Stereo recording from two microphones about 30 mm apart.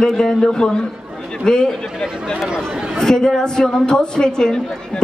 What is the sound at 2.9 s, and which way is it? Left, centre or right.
A woman's voice, centre.